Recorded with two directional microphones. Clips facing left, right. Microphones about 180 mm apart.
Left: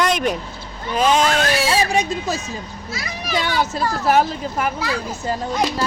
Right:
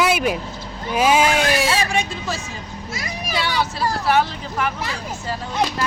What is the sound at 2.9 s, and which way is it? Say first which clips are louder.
Speech: even; 45° right (ahead or behind).